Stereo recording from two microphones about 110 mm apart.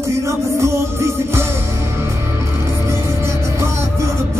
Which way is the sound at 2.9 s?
25° right (ahead or behind).